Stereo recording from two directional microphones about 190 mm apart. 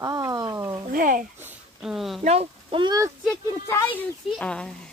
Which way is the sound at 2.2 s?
35° right (ahead or behind).